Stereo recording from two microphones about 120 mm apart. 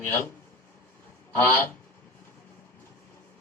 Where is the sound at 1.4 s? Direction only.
20° left (ahead or behind).